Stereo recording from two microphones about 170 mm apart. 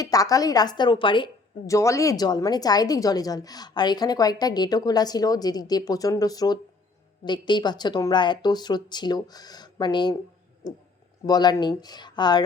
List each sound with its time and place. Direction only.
0.0 s a woman's voice: 20° left (ahead or behind)